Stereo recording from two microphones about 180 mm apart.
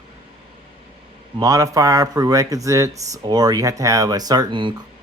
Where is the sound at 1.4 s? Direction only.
20° right (ahead or behind).